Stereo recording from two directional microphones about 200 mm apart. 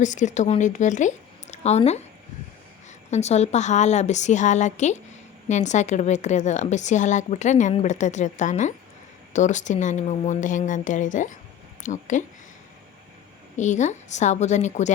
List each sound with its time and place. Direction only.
0.0 s a woman's voice: 35° left (ahead or behind)
3.1 s a woman's voice: 35° left (ahead or behind)
13.6 s a woman's voice: 35° left (ahead or behind)